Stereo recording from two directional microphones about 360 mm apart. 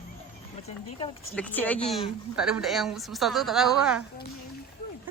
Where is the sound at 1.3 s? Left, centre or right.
Centre.